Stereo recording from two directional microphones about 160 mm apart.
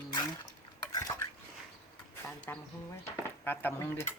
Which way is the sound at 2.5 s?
15° left (ahead or behind).